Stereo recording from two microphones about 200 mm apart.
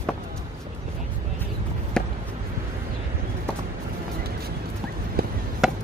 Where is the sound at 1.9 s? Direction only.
5° left (ahead or behind).